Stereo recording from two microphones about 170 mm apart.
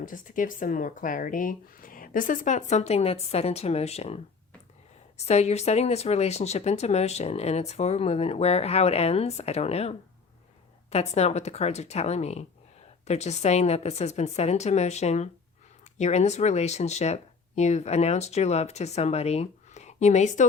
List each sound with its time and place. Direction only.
0.0 s speech: 50° left (ahead or behind)
10.9 s speech: 40° left (ahead or behind)